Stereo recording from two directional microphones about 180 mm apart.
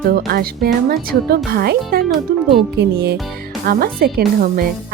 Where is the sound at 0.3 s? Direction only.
55° right (ahead or behind).